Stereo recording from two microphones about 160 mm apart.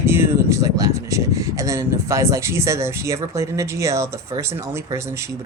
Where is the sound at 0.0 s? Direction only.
15° right (ahead or behind).